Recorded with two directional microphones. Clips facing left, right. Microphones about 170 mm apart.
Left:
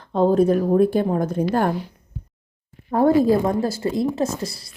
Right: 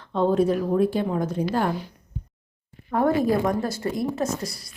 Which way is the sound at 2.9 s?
30° left (ahead or behind).